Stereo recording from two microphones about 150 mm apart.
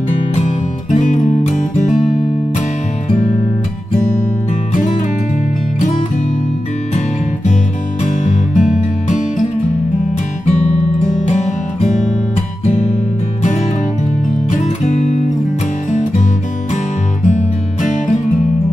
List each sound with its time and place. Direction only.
0.5 s music: 50° left (ahead or behind)
8.0 s music: 55° left (ahead or behind)
12.6 s music: 50° left (ahead or behind)
14.5 s music: 55° left (ahead or behind)
17.3 s music: 55° left (ahead or behind)